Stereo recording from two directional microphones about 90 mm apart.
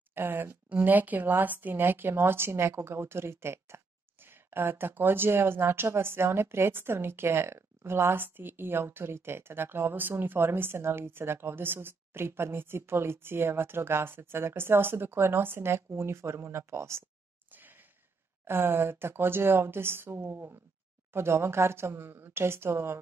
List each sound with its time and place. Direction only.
0.1 s speech: 25° right (ahead or behind)
17.5 s sigh: 20° right (ahead or behind)
18.5 s speech: 25° right (ahead or behind)